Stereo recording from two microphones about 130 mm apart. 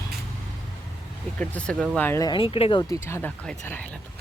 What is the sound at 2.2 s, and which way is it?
Speech, 40° left (ahead or behind).